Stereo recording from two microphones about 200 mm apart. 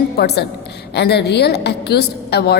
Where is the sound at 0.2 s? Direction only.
55° left (ahead or behind).